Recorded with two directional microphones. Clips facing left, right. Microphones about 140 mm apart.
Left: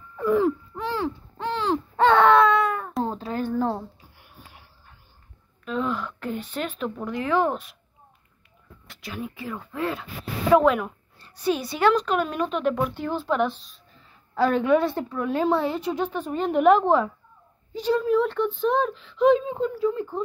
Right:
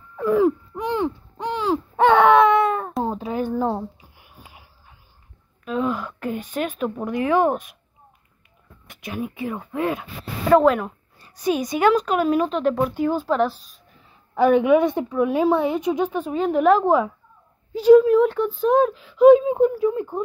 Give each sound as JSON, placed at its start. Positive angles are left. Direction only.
{"t": 0.2, "sound": "a sound", "side_deg": -5}
{"t": 0.8, "sound": "baby cry", "side_deg": -20}
{"t": 3.0, "sound": "a sound", "side_deg": -10}
{"t": 7.1, "sound": "a woman's voice", "side_deg": -15}
{"t": 8.8, "sound": "speech", "side_deg": -20}
{"t": 10.5, "sound": "speech", "side_deg": 0}
{"t": 11.1, "sound": "a woman's voice", "side_deg": -10}
{"t": 14.3, "sound": "a woman's voice", "side_deg": -15}